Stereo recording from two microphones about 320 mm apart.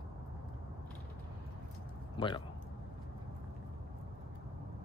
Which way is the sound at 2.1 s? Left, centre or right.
Centre.